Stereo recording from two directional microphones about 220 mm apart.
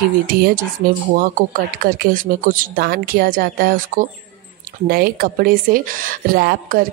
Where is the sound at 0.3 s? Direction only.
40° right (ahead or behind).